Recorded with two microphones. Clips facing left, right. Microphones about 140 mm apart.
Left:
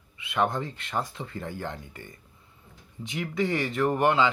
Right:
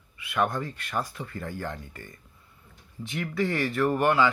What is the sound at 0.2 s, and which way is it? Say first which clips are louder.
Speech: even; 25° left (ahead or behind).